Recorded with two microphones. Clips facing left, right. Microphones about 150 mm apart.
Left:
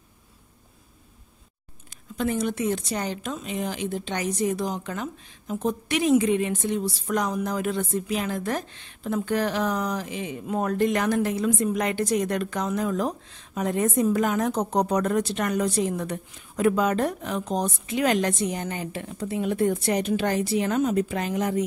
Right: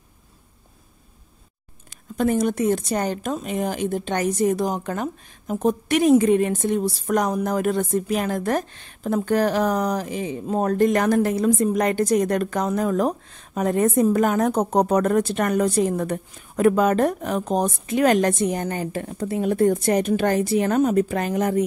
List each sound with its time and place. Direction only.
2.1 s speech: 45° right (ahead or behind)